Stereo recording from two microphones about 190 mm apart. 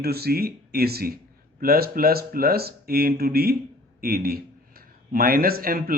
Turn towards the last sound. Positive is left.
turn(degrees=-50)  # may be behind; listen again after turning